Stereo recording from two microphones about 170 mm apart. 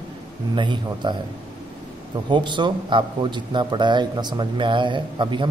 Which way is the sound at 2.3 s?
25° right (ahead or behind).